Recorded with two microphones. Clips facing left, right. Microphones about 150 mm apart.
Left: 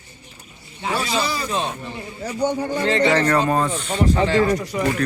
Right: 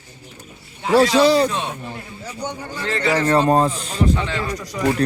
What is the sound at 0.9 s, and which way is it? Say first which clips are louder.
Speech: right 10 dB; 90° right.